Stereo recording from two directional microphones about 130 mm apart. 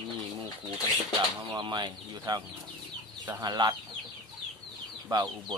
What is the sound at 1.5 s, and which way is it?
Speech, 35° right (ahead or behind).